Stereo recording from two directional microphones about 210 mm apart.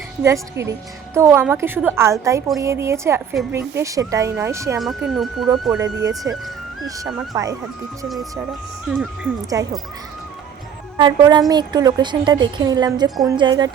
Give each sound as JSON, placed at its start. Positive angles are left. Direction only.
{"t": 0.2, "sound": "speech", "side_deg": -15}
{"t": 4.8, "sound": "speech", "side_deg": 0}
{"t": 5.8, "sound": "speech", "side_deg": -15}
{"t": 7.3, "sound": "speech", "side_deg": -15}
{"t": 8.0, "sound": "speech", "side_deg": 0}
{"t": 10.9, "sound": "a woman's voice", "side_deg": -20}
{"t": 13.1, "sound": "speech", "side_deg": 0}
{"t": 13.3, "sound": "a woman's voice", "side_deg": -20}